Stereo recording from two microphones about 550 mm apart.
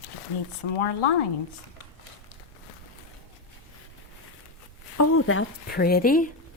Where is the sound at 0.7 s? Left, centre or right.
Left.